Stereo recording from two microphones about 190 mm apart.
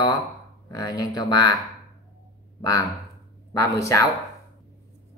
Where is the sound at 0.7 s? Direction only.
20° left (ahead or behind).